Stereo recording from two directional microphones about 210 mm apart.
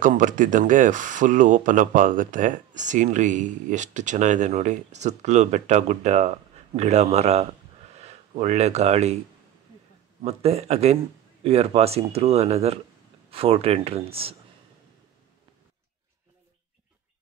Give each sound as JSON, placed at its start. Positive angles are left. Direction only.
{"t": 0.0, "sound": "speech", "side_deg": -40}
{"t": 10.2, "sound": "speech", "side_deg": -30}